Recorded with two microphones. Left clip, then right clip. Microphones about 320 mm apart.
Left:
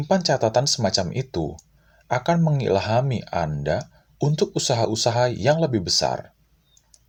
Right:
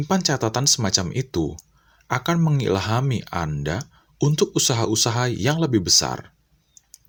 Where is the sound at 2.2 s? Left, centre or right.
Right.